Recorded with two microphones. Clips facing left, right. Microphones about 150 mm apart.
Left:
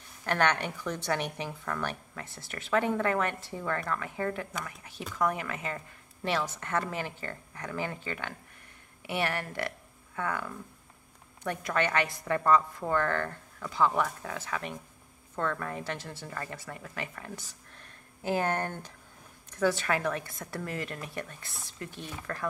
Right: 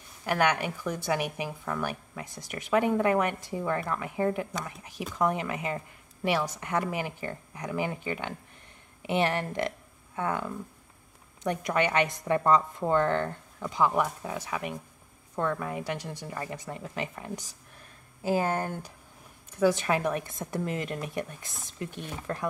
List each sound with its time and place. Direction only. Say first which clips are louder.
0.2 s a woman's voice: right 2 dB; 10° right (ahead or behind)